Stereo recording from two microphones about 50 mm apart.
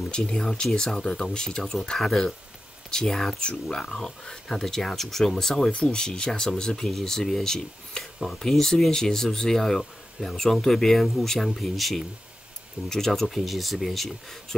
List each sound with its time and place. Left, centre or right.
0.1 s speech: centre
1.6 s speech: centre